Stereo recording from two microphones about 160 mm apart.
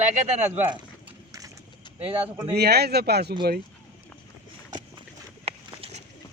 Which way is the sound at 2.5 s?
90° right.